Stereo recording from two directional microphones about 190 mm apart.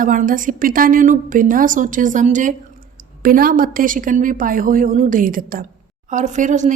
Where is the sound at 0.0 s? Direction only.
45° right (ahead or behind).